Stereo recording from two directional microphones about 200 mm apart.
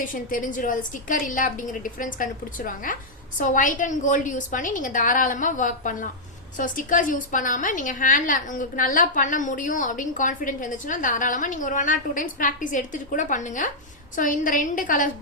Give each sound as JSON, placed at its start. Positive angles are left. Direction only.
{"t": 0.0, "sound": "a woman's voice", "side_deg": 45}